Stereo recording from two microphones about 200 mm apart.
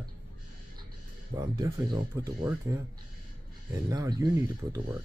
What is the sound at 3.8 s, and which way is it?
Speech, 20° right (ahead or behind).